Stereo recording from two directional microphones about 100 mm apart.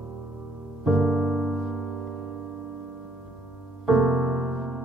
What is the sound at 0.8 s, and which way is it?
Music, centre (ahead or behind).